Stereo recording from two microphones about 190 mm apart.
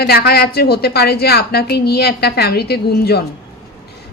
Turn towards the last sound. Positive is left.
turn(degrees=55)  # may be behind; listen again after turning